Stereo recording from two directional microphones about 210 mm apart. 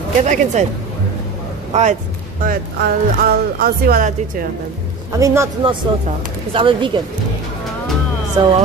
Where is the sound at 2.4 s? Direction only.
45° right (ahead or behind).